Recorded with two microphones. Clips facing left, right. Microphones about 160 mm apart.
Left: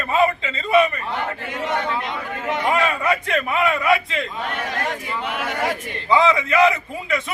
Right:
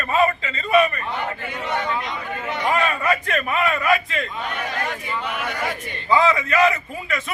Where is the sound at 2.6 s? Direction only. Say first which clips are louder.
Even; 15° left (ahead or behind).